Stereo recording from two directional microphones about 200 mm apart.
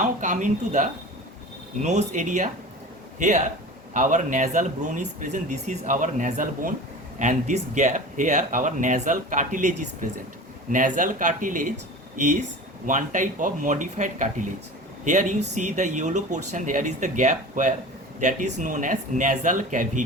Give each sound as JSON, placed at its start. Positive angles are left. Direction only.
{"t": 0.0, "sound": "speech", "side_deg": -35}